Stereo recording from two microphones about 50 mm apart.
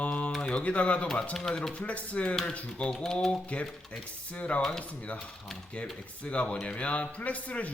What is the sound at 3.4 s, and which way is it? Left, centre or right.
Speech, left.